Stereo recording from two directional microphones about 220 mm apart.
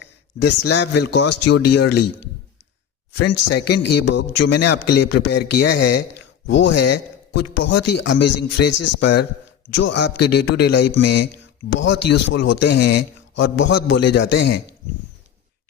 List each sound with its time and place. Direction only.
0.0 s a man's voice: 50° left (ahead or behind)
3.2 s a man's voice: 50° left (ahead or behind)
3.8 s speech: 90° left
4.1 s a man's voice: 55° left (ahead or behind); by 6.0 s 90° left
6.1 s a man's voice: 55° left (ahead or behind)